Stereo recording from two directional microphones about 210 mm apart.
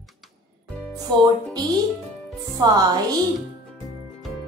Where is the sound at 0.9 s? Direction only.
20° right (ahead or behind).